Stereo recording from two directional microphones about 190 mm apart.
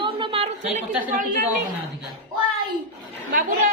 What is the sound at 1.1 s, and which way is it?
Speech, 45° right (ahead or behind).